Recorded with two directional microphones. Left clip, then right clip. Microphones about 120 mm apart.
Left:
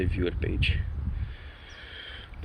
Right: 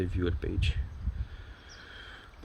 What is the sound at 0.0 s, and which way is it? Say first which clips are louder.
Speech: left 3 dB; 35° right (ahead or behind).